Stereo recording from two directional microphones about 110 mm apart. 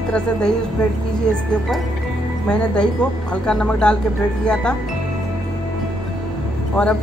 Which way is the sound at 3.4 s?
10° left (ahead or behind).